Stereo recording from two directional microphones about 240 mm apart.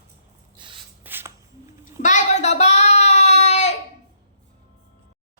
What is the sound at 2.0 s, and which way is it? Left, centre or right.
Child singing, left.